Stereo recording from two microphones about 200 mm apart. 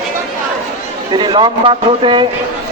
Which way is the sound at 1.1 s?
25° right (ahead or behind).